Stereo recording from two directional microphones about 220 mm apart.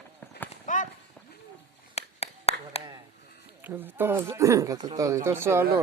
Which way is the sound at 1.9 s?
30° left (ahead or behind).